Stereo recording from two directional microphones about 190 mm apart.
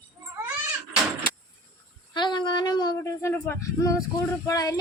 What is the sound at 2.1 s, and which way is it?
Child singing, 25° left (ahead or behind).